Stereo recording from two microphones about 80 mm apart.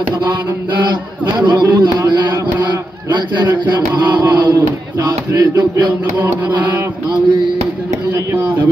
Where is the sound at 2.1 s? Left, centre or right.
Right.